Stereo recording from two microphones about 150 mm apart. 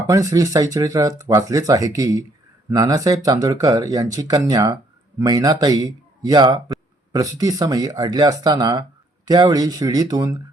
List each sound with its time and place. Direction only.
0.1 s speech: 20° right (ahead or behind)